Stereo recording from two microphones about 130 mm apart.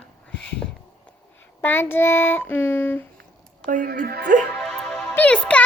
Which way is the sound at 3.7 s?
90° right.